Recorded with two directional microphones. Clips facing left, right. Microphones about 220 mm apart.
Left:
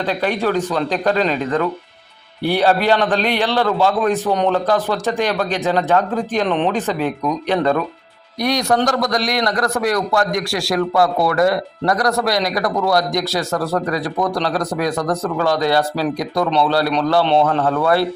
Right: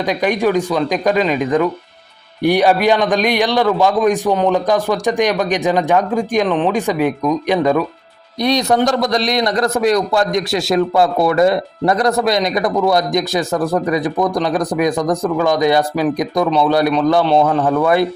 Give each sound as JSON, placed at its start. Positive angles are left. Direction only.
{"t": 0.0, "sound": "a man's voice", "side_deg": -15}
{"t": 6.5, "sound": "speech", "side_deg": 0}
{"t": 6.7, "sound": "a man's voice", "side_deg": -10}
{"t": 8.4, "sound": "a man's voice", "side_deg": -25}